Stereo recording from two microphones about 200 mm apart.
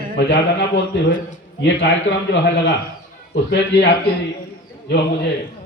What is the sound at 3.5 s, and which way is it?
Speech, 60° left (ahead or behind).